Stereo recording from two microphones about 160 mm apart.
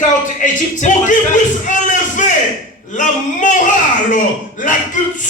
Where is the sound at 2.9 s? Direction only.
50° left (ahead or behind).